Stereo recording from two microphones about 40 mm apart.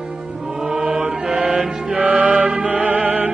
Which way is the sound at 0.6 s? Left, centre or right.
Right.